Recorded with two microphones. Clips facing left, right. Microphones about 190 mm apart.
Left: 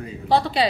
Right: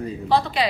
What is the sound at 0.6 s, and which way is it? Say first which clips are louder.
Speech: left 2 dB; 30° left (ahead or behind).